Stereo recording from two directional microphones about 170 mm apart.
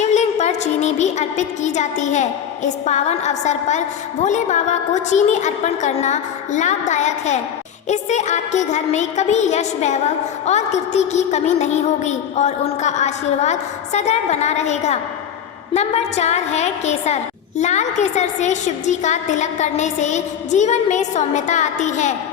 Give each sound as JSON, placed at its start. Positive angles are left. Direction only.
{"t": 0.0, "sound": "a woman's voice", "side_deg": 40}